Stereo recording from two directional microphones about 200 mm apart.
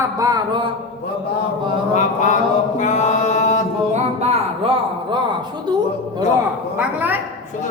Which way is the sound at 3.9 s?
35° right (ahead or behind).